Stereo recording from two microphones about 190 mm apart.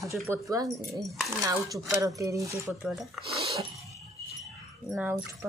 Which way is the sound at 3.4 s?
30° right (ahead or behind).